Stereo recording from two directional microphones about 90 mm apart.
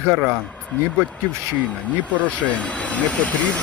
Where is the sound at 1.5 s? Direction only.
15° left (ahead or behind).